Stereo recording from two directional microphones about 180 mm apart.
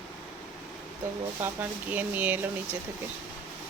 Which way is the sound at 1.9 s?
10° right (ahead or behind).